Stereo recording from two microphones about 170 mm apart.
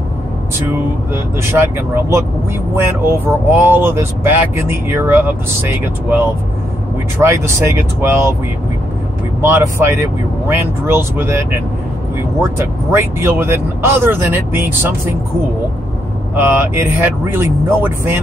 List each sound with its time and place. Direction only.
1.5 s speech: 15° right (ahead or behind)
9.4 s speech: 15° right (ahead or behind)
12.4 s speech: 15° right (ahead or behind)
16.3 s speech: 15° right (ahead or behind)